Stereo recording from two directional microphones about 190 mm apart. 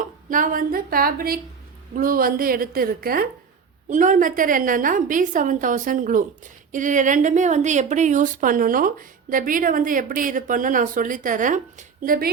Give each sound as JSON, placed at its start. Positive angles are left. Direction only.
{"t": 0.0, "sound": "a woman's voice", "side_deg": -45}